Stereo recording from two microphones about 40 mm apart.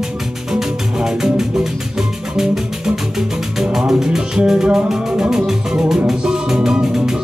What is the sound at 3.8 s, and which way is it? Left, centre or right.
Music, centre.